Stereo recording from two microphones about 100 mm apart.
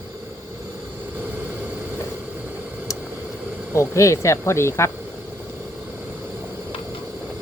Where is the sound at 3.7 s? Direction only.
30° left (ahead or behind).